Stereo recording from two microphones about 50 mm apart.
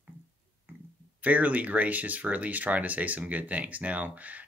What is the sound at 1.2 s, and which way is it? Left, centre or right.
Speech, right.